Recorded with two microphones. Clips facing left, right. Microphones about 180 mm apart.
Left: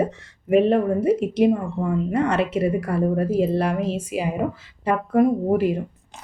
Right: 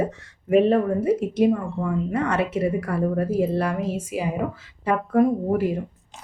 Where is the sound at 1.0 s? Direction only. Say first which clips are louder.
Left 2 dB; 15° left (ahead or behind).